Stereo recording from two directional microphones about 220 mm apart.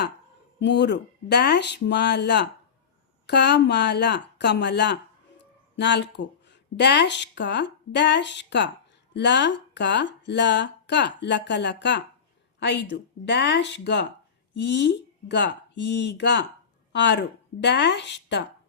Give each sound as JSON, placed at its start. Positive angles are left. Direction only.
{"t": 0.6, "sound": "speech", "side_deg": 50}